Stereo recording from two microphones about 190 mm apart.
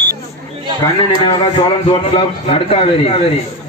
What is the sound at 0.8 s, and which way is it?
A man's voice, 25° left (ahead or behind).